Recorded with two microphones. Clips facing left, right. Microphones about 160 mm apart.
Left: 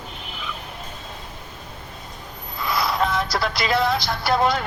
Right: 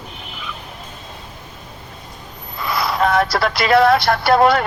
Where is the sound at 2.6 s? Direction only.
65° right (ahead or behind).